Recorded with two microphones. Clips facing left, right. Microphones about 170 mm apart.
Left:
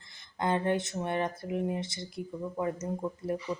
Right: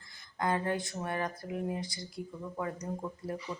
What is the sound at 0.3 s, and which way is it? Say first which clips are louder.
Speech: left 3 dB; 25° left (ahead or behind).